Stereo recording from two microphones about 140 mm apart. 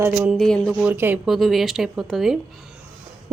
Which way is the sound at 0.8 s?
15° right (ahead or behind).